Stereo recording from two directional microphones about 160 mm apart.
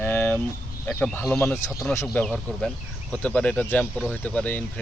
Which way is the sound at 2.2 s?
5° left (ahead or behind).